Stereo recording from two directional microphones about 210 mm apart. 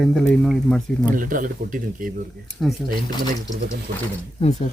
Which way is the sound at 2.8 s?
Centre (ahead or behind).